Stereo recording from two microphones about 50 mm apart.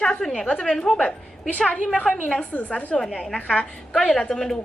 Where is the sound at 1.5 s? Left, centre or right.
Left.